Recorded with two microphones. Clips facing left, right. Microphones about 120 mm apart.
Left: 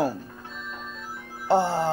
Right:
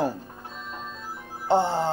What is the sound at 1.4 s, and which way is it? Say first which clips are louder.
Speech: even; 20° right (ahead or behind).